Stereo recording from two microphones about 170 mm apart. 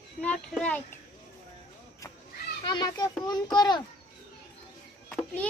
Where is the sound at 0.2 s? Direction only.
5° left (ahead or behind).